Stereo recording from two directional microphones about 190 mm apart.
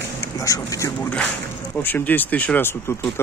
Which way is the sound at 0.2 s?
15° left (ahead or behind).